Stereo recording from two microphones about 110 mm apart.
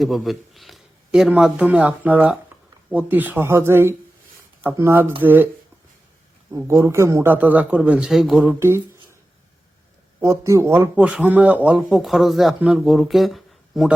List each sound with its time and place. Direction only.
0.0 s a man's voice: centre (ahead or behind); by 5.5 s 20° right (ahead or behind)
6.7 s a man's voice: 25° right (ahead or behind); by 8.4 s centre (ahead or behind)
8.5 s speech: 25° right (ahead or behind)
10.2 s a man's voice: 25° right (ahead or behind)
11.9 s speech: centre (ahead or behind)